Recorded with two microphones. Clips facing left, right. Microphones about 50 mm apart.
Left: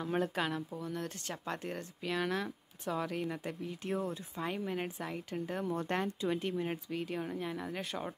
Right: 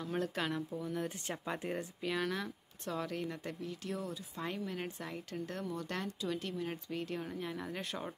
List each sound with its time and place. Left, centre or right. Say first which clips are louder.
0.0 s speech: left 3 dB; left
0.4 s speech: left 1 dB; centre
2.0 s speech: left 2 dB; centre
3.8 s speech: left 7 dB; left
4.8 s speech: left 3 dB; centre
5.7 s speech: left 5 dB; left
6.9 s speech: left 2 dB; centre